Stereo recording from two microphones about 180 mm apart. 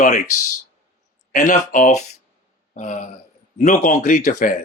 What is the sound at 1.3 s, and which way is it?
Speech, 45° left (ahead or behind).